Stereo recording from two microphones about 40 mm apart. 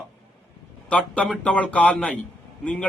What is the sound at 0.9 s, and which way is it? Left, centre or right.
A man's voice, left.